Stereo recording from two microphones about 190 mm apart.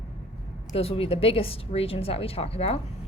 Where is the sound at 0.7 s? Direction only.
30° left (ahead or behind).